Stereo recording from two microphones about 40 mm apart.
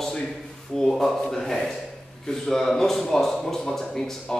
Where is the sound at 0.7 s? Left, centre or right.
Centre.